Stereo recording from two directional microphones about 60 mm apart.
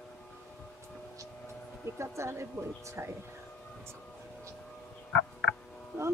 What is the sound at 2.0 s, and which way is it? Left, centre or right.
Speech, right.